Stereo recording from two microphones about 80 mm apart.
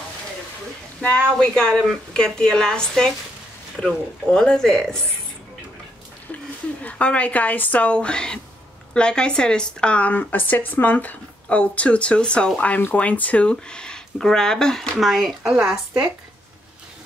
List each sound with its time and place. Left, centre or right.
1.0 s speech: centre
6.8 s speech: centre